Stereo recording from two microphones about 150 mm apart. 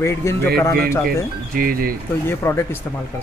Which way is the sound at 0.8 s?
75° right (ahead or behind).